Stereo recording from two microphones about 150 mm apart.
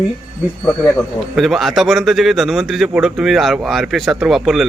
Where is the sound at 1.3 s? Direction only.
Centre (ahead or behind).